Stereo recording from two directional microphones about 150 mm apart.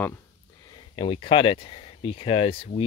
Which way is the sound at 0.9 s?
35° left (ahead or behind).